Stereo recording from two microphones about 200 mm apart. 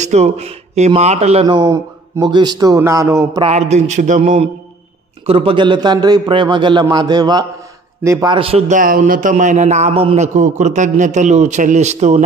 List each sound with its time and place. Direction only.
0.0 s a man's voice: 35° right (ahead or behind)
1.6 s speech: 20° right (ahead or behind)
3.4 s a man's voice: 35° right (ahead or behind)